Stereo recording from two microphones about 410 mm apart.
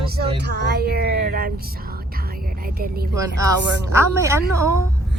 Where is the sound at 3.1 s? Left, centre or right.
Centre.